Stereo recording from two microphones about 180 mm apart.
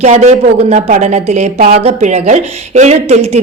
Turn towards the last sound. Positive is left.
turn(degrees=-35)  # may be behind; listen again after turning